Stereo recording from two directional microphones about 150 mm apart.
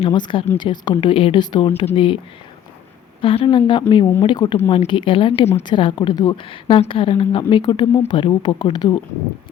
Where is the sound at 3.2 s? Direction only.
35° left (ahead or behind).